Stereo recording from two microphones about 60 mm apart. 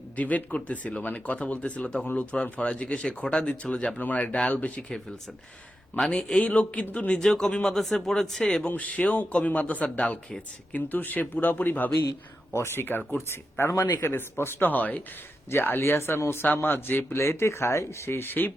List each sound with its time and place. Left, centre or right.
0.2 s speech: left
6.1 s speech: centre
8.6 s speech: left
12.5 s speech: left
13.1 s speech: left
15.4 s speech: left
17.2 s speech: left